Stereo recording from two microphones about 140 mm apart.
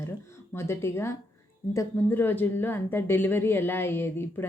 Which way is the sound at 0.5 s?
20° left (ahead or behind).